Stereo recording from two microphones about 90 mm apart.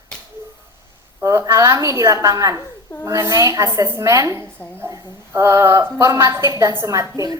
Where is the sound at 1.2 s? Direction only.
35° right (ahead or behind).